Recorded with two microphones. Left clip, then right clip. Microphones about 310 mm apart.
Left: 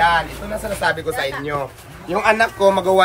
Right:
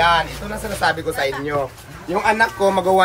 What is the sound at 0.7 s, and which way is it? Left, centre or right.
A man's voice, centre.